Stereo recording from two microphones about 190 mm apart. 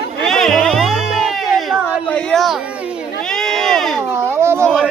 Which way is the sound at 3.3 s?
Centre (ahead or behind).